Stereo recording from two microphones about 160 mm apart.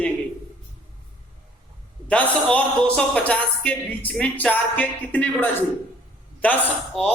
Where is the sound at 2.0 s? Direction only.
10° left (ahead or behind).